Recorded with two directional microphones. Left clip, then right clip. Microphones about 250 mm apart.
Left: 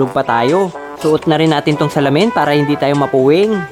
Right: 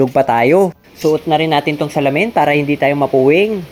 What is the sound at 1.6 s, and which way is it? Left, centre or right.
Speech, centre.